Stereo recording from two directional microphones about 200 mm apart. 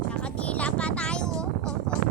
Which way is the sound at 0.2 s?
5° left (ahead or behind).